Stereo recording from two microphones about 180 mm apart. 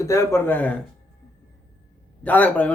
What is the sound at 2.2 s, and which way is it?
Speech, 10° left (ahead or behind).